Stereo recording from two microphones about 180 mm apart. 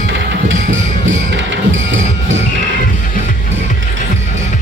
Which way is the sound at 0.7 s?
90° right.